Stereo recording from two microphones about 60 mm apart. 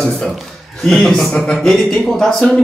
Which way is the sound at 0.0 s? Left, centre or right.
Centre.